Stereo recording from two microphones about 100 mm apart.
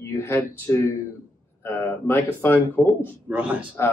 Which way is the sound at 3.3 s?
15° right (ahead or behind).